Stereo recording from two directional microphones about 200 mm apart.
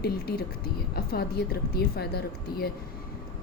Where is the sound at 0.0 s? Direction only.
50° left (ahead or behind).